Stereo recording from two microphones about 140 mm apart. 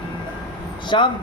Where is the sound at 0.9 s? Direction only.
35° left (ahead or behind).